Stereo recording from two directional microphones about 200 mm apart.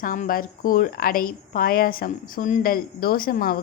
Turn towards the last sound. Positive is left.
turn(degrees=45)  # may be behind; listen again after turning